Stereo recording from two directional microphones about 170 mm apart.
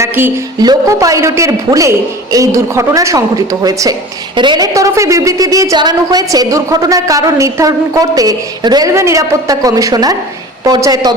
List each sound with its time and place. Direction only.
0.0 s a woman's voice: 20° right (ahead or behind)